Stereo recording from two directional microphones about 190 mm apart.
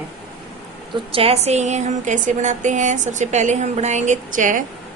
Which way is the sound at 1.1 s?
30° right (ahead or behind).